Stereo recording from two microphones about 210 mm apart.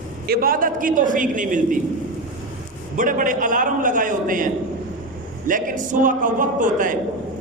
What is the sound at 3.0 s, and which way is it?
A man's voice, 40° right (ahead or behind).